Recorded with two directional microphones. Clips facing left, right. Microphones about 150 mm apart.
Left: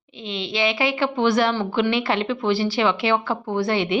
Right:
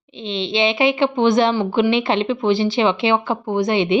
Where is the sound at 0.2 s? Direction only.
25° right (ahead or behind).